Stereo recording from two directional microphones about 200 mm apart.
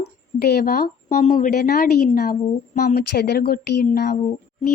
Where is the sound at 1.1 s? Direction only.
40° left (ahead or behind).